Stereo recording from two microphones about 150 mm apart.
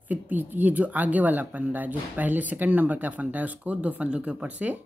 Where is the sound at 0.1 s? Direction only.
10° right (ahead or behind).